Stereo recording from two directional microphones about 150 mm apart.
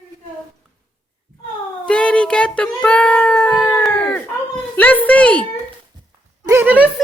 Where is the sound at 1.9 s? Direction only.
5° left (ahead or behind).